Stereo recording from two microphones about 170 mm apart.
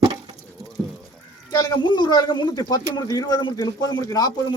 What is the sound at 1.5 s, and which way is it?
Speech, 25° left (ahead or behind).